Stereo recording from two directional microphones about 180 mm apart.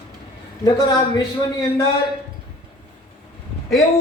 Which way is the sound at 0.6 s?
20° left (ahead or behind).